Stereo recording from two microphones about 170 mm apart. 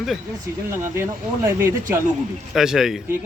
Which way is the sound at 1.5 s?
15° right (ahead or behind).